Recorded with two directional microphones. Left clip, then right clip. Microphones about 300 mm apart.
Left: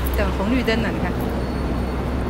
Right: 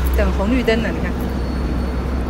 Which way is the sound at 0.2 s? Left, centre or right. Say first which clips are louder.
Right 3 dB; centre.